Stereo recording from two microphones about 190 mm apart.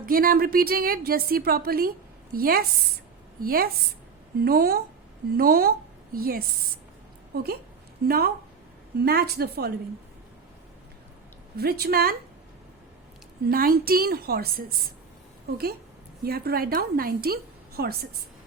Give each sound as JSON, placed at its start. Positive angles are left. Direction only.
{"t": 0.0, "sound": "a woman's voice", "side_deg": -50}
{"t": 11.5, "sound": "a woman's voice", "side_deg": -55}
{"t": 13.4, "sound": "a woman's voice", "side_deg": -50}